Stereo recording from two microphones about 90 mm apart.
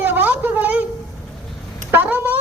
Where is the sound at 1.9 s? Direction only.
20° right (ahead or behind).